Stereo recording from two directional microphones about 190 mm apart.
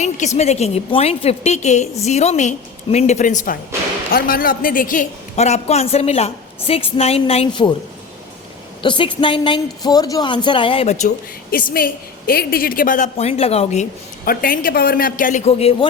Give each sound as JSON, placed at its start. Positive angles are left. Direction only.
{"t": 0.3, "sound": "a woman's voice", "side_deg": 35}
{"t": 8.8, "sound": "a woman's voice", "side_deg": 25}
{"t": 11.5, "sound": "a woman's voice", "side_deg": 50}
{"t": 14.3, "sound": "a woman's voice", "side_deg": 50}